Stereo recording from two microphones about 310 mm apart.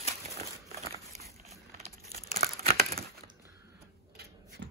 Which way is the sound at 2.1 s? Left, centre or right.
Right.